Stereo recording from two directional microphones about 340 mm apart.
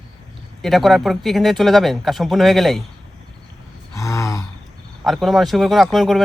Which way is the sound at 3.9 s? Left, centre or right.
Centre.